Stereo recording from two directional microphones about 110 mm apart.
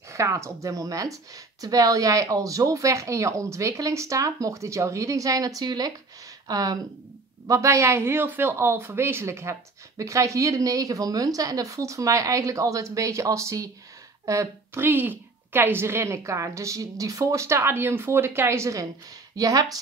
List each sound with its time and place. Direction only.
0.1 s speech: 25° right (ahead or behind)